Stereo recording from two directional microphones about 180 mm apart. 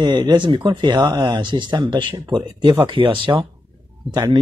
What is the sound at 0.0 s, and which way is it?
Speech, 25° right (ahead or behind).